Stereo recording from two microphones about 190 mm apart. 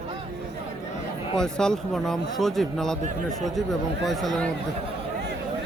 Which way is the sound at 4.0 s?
Centre (ahead or behind).